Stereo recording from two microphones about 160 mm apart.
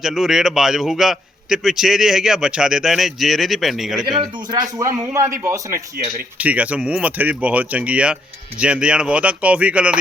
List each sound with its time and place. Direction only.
0.0 s a man's voice: 5° right (ahead or behind)
4.2 s speech: 20° right (ahead or behind)
6.4 s speech: 10° right (ahead or behind)